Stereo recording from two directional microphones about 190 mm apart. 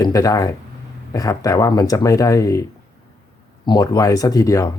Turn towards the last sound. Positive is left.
turn(degrees=15)  # may be behind; listen again after turning